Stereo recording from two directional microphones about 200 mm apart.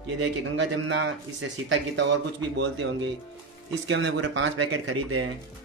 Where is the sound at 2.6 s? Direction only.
65° right (ahead or behind).